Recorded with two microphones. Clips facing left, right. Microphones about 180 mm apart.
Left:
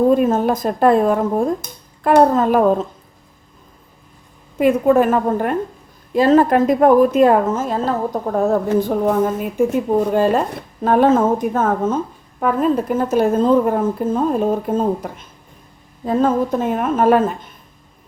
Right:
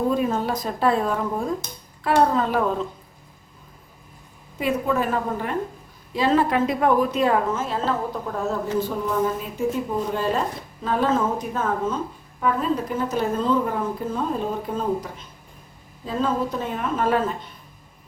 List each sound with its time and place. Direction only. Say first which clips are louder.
0.1 s a woman's voice: left 8 dB; 50° left (ahead or behind)
4.5 s a woman's voice: left 10 dB; 50° left (ahead or behind)